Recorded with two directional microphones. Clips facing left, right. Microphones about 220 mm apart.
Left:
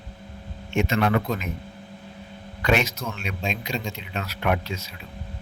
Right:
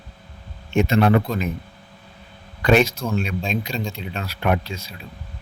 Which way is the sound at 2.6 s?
35° right (ahead or behind).